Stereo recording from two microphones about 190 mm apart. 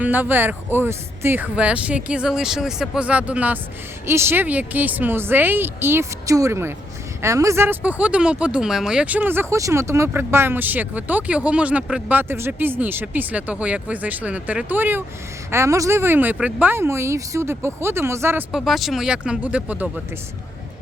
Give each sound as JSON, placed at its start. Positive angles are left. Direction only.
{"t": 0.0, "sound": "speech", "side_deg": -10}
{"t": 18.5, "sound": "speech", "side_deg": 0}